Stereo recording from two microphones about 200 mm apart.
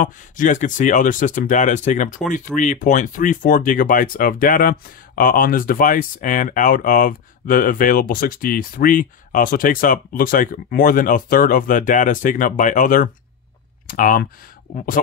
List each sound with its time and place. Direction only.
0.0 s speech: 40° left (ahead or behind)